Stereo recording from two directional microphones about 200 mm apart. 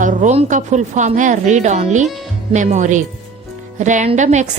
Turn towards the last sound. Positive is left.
turn(degrees=-35)  # may be behind; listen again after turning